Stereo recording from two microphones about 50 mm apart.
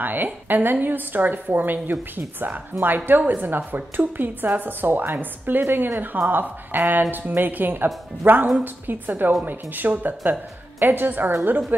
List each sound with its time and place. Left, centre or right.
0.0 s a woman's voice: right